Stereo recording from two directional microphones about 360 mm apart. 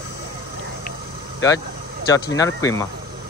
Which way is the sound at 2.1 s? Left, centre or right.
Centre.